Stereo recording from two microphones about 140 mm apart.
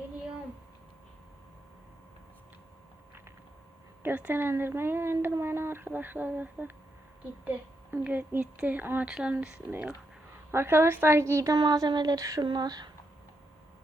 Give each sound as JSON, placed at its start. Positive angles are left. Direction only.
{"t": 4.0, "sound": "a woman's voice", "side_deg": -15}